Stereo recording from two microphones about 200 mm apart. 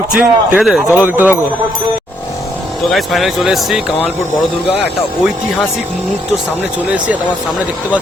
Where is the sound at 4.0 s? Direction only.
30° left (ahead or behind).